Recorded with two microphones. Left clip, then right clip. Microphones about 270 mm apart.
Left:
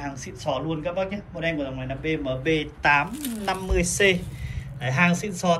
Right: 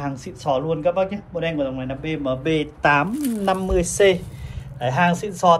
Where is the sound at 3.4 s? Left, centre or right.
Right.